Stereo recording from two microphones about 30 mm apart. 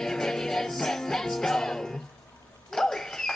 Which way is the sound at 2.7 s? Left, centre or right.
Centre.